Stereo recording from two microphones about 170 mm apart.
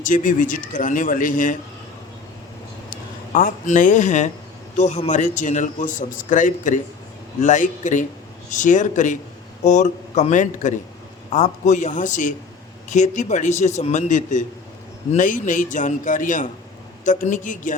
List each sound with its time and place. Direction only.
0.0 s a man's voice: 50° left (ahead or behind)
2.9 s a man's voice: 55° left (ahead or behind)